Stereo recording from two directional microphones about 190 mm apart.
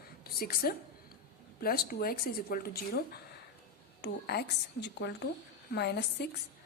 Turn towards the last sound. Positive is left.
turn(degrees=60)  # may be behind; listen again after turning